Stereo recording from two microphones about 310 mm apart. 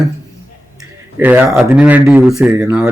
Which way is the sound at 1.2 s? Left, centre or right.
Centre.